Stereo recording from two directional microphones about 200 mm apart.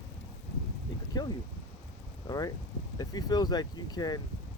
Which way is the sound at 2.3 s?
20° left (ahead or behind).